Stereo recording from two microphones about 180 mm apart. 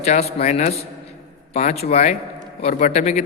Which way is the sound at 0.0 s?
35° left (ahead or behind).